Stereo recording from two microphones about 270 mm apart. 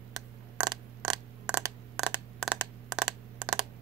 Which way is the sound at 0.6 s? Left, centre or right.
Centre.